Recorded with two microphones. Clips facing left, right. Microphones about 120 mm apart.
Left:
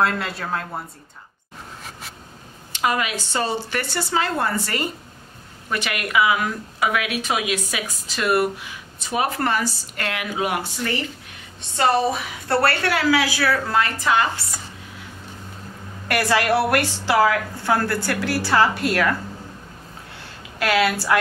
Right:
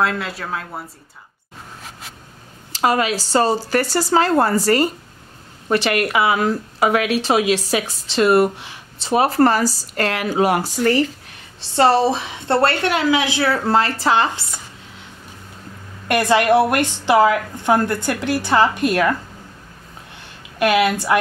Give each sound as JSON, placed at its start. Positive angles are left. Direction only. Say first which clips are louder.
{"t": 0.0, "sound": "speech", "louder": "right 1 dB", "side_deg": 0}
{"t": 2.7, "sound": "a woman's voice", "louder": "right 5 dB", "side_deg": -35}
{"t": 16.1, "sound": "a woman's voice", "louder": "right 5 dB", "side_deg": -20}
{"t": 20.5, "sound": "a woman's voice", "louder": "right 4 dB", "side_deg": -20}